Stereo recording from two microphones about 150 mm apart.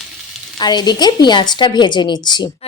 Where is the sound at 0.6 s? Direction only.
30° left (ahead or behind).